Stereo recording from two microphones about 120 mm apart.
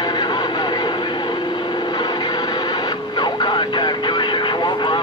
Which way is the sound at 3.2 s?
40° left (ahead or behind).